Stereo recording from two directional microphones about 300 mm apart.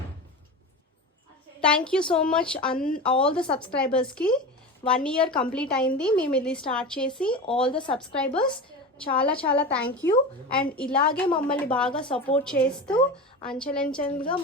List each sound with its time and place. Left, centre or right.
1.6 s speech: centre
2.7 s a woman's voice: left
3.0 s speech: centre
7.7 s a woman's voice: centre
7.9 s a woman's voice: centre
12.0 s a woman's voice: centre
12.5 s speech: centre
13.9 s a woman's voice: centre